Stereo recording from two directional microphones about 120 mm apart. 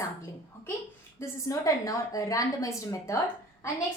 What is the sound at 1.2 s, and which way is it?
A woman's voice, 25° left (ahead or behind).